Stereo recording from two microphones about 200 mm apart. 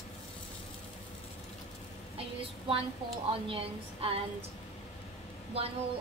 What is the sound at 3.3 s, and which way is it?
Speech, 25° right (ahead or behind).